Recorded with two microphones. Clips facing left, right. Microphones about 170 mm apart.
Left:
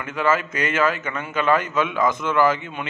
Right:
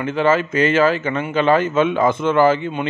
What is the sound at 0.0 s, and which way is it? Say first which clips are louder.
A man's voice: right 5 dB; 30° right (ahead or behind).